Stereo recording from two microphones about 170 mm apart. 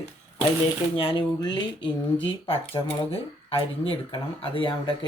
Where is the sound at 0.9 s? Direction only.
30° left (ahead or behind).